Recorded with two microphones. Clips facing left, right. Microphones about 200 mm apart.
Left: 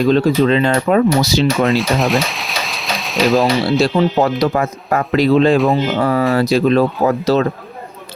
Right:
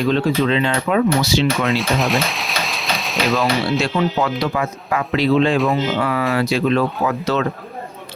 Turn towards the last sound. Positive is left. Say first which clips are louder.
# left 5 dB
turn(degrees=35)  # may be behind; listen again after turning